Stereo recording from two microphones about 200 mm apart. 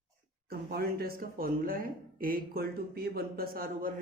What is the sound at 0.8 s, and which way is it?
Speech, 50° right (ahead or behind).